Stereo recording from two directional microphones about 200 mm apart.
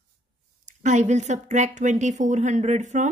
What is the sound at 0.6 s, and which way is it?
Speech, 35° right (ahead or behind).